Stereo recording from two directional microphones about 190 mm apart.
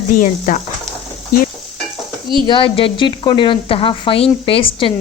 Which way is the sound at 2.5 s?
25° left (ahead or behind).